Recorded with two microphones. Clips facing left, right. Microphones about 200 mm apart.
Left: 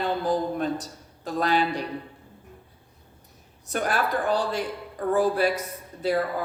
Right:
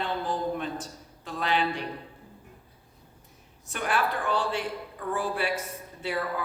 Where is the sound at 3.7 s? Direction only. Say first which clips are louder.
Left 3 dB; 40° left (ahead or behind).